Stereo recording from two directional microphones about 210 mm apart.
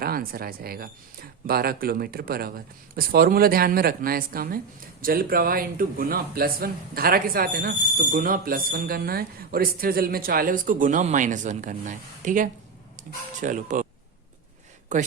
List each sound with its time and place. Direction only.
0.0 s speech: 45° right (ahead or behind)